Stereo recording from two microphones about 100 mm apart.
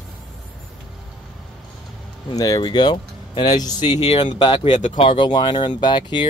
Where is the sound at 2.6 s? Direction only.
50° left (ahead or behind).